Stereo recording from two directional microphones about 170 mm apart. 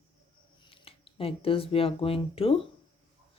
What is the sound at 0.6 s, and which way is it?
Speech, 30° left (ahead or behind).